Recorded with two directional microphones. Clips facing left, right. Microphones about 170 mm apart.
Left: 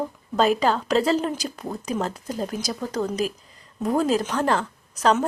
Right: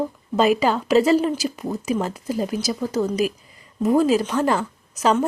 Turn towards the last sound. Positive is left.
turn(degrees=-10)  # may be behind; listen again after turning